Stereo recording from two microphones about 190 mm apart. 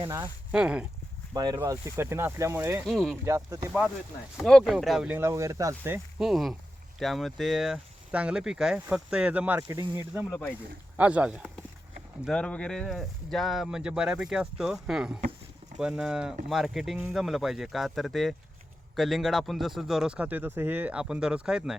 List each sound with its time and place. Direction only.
0.0 s speech: 20° right (ahead or behind)
0.5 s speech: 5° right (ahead or behind)
1.3 s speech: 20° right (ahead or behind)
2.8 s speech: centre (ahead or behind)
3.2 s speech: 15° right (ahead or behind)
3.7 s speech: centre (ahead or behind)
6.1 s speech: centre (ahead or behind)
9.6 s speech: 20° right (ahead or behind)
10.2 s speech: 5° left (ahead or behind)